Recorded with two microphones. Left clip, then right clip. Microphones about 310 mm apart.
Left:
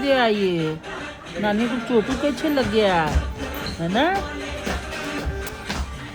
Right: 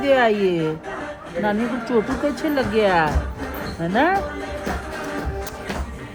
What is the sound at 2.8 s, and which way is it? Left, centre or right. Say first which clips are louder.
A woman's voice: right 4 dB; centre.